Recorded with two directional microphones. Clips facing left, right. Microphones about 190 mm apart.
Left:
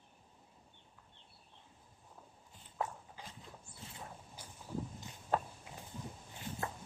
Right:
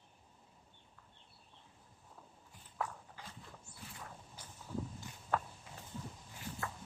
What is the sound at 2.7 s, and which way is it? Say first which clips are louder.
Clip-clop: left 2 dB; 25° left (ahead or behind).